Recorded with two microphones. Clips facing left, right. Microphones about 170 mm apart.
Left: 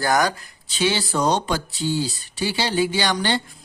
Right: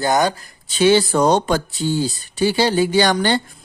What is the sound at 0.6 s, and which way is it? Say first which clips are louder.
Speech: right 9 dB; 50° right (ahead or behind).